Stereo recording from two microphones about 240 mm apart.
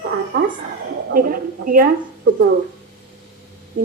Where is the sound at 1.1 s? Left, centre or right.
Right.